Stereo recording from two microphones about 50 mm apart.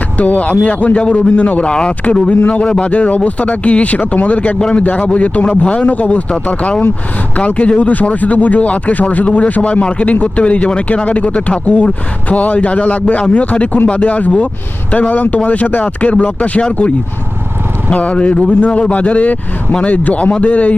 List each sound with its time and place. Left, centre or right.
0.2 s speech: left